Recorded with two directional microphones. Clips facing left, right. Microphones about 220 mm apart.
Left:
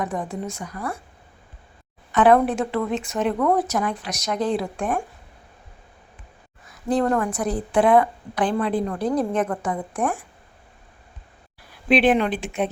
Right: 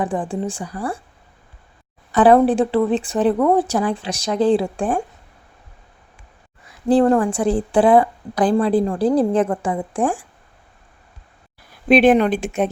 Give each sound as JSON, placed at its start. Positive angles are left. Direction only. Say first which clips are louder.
{"t": 0.0, "sound": "speech", "louder": "right 5 dB", "side_deg": -30}
{"t": 2.1, "sound": "speech", "louder": "right 4 dB", "side_deg": -30}
{"t": 6.7, "sound": "a woman's voice", "louder": "right 7 dB", "side_deg": -30}
{"t": 11.9, "sound": "a woman's voice", "louder": "right 5 dB", "side_deg": -45}